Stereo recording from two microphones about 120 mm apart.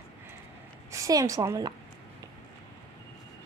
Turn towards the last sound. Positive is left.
turn(degrees=-30)  # may be behind; listen again after turning